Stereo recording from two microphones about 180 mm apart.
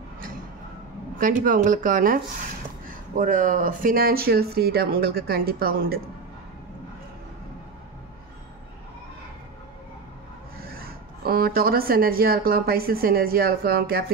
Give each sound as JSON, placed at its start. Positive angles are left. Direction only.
{"t": 1.4, "sound": "speech", "side_deg": -45}
{"t": 3.2, "sound": "speech", "side_deg": -45}
{"t": 10.6, "sound": "speech", "side_deg": -55}